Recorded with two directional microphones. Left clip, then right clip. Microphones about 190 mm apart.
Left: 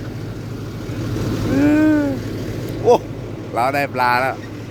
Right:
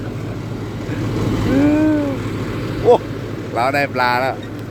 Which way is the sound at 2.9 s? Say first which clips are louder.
Right 1 dB; 15° left (ahead or behind).